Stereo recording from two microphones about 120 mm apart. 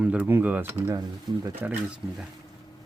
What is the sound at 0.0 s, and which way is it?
Speech, 10° right (ahead or behind).